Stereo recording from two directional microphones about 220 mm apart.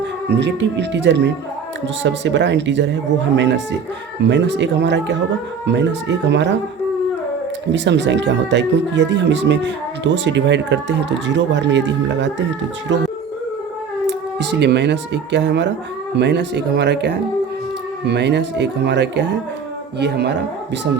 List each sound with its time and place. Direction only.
0.3 s speech: 50° right (ahead or behind)
7.7 s speech: 55° right (ahead or behind)
14.1 s speech: 50° right (ahead or behind)